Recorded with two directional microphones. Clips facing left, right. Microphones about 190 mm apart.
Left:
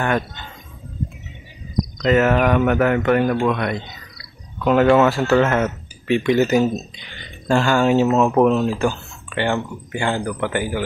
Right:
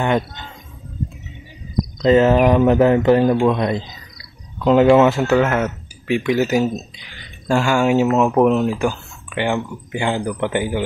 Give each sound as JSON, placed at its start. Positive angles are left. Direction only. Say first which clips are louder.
{"t": 2.0, "sound": "speech", "louder": "right 4 dB", "side_deg": -25}
{"t": 5.3, "sound": "speech", "louder": "even", "side_deg": -5}